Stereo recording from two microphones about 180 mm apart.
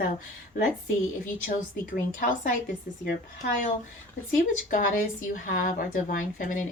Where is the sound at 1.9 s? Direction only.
45° left (ahead or behind).